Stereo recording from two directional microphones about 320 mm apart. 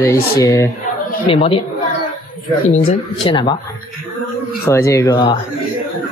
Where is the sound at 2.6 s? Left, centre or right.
Centre.